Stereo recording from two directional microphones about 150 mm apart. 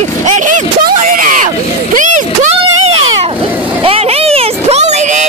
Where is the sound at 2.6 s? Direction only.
40° right (ahead or behind).